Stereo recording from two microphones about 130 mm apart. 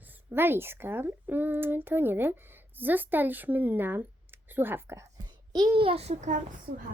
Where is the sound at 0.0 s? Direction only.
15° right (ahead or behind).